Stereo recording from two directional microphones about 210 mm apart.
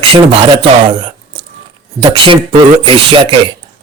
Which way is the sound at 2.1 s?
25° right (ahead or behind).